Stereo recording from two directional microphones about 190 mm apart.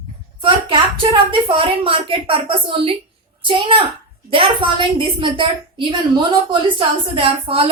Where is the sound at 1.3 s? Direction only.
25° right (ahead or behind).